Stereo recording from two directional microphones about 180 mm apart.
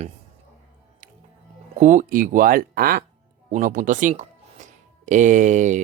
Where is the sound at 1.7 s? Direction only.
45° right (ahead or behind).